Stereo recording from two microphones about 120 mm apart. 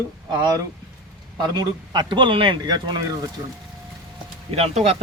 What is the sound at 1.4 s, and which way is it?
Speech, 35° right (ahead or behind).